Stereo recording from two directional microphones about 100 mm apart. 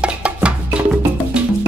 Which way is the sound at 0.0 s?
10° right (ahead or behind).